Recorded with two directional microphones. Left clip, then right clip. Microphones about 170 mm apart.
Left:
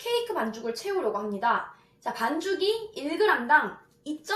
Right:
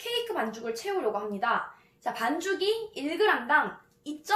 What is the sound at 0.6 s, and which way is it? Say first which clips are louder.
A woman's voice: left 1 dB; 40° right (ahead or behind).